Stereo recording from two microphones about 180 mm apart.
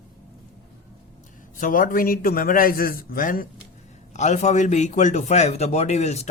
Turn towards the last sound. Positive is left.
turn(degrees=35)  # may be behind; listen again after turning